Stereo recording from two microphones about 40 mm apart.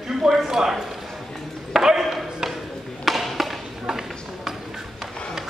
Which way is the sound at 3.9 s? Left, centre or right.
Centre.